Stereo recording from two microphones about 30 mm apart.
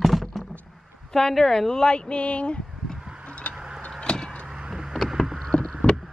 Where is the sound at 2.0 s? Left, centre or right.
Left.